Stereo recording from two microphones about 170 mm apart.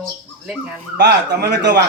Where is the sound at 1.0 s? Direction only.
80° right.